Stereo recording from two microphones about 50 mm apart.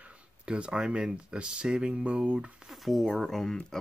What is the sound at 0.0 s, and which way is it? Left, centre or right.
Speech, right.